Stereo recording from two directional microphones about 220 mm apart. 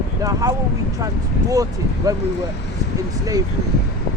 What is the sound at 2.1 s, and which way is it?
Speech, 15° right (ahead or behind).